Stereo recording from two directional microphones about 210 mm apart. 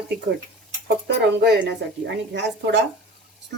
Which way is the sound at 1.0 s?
55° right (ahead or behind).